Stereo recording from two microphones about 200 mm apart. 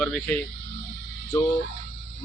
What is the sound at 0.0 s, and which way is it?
Speech, centre (ahead or behind).